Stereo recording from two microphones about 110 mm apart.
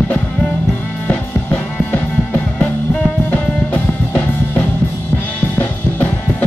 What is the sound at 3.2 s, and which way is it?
Drum kit, 15° left (ahead or behind).